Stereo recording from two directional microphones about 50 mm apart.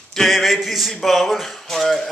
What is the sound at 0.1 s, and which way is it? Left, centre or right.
Speech, centre.